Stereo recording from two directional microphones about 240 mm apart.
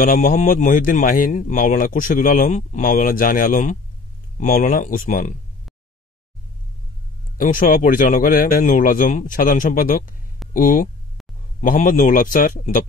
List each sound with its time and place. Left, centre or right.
0.0 s speech: left
7.3 s speech: left